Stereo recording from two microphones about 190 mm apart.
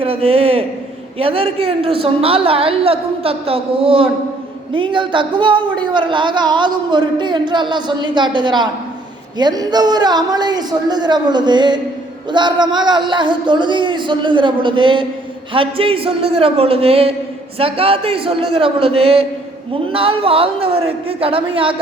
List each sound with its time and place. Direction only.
0.0 s a man's voice: 30° right (ahead or behind)